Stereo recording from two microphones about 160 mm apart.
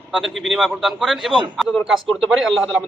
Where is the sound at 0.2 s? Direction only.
Centre (ahead or behind).